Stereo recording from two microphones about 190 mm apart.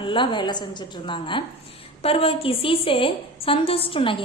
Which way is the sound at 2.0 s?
30° left (ahead or behind).